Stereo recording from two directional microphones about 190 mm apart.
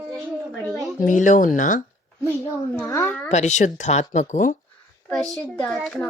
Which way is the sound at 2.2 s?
10° left (ahead or behind).